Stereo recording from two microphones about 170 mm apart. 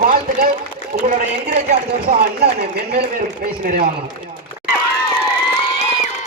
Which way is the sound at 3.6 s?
60° right (ahead or behind).